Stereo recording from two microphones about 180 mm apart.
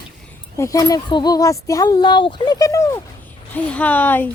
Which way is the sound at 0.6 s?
20° left (ahead or behind).